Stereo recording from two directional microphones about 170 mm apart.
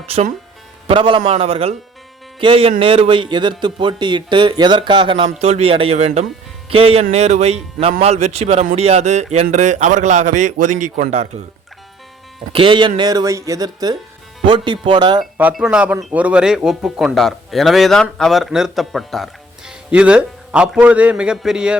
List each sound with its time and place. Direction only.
0.9 s a man's voice: 30° right (ahead or behind)
12.5 s speech: 30° right (ahead or behind)
15.2 s speech: 5° right (ahead or behind)